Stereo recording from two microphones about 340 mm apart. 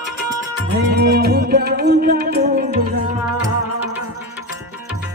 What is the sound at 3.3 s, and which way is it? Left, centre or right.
Music, centre.